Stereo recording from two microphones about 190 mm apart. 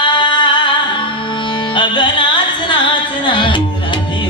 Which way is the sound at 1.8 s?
25° left (ahead or behind).